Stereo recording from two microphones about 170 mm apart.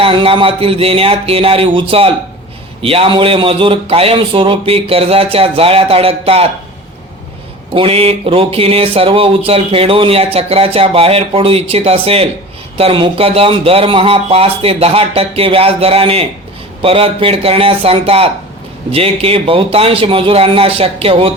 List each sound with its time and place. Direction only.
0.0 s a man's voice: 30° right (ahead or behind)
7.7 s a man's voice: 35° right (ahead or behind)